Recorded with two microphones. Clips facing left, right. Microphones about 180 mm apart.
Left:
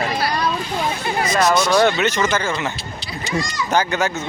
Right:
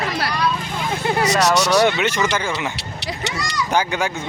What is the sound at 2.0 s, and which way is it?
Speech, 10° right (ahead or behind).